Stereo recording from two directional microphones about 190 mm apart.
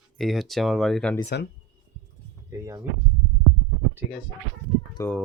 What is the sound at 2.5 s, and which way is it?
Speech, 15° right (ahead or behind).